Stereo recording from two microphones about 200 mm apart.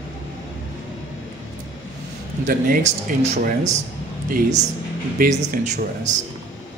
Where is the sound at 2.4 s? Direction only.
45° right (ahead or behind).